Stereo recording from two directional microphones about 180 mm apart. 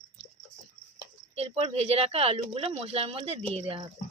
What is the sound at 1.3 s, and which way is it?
Speech, 35° right (ahead or behind).